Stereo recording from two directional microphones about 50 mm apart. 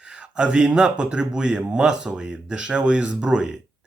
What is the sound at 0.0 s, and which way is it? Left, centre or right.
Speech, centre.